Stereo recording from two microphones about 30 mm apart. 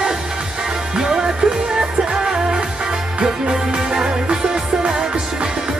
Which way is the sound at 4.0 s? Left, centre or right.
Right.